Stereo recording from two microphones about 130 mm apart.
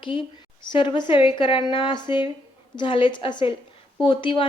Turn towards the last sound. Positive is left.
turn(degrees=40)  # may be behind; listen again after turning